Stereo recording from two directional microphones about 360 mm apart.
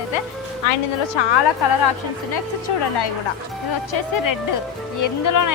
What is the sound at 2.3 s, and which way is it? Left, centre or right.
Speech, left.